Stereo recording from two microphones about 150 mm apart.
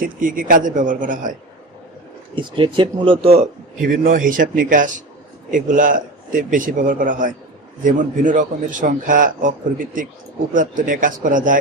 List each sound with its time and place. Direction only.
0.0 s a man's voice: 65° right (ahead or behind)
2.3 s speech: 35° right (ahead or behind)
3.8 s a man's voice: 65° right (ahead or behind)